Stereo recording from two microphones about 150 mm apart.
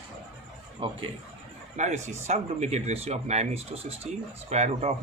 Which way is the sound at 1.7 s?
50° right (ahead or behind).